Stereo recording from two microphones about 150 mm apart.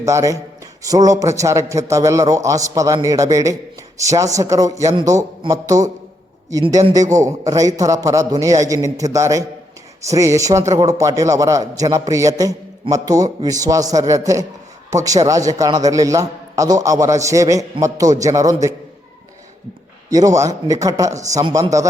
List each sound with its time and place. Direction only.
0.0 s a man's voice: 20° right (ahead or behind)
20.1 s a man's voice: 25° right (ahead or behind)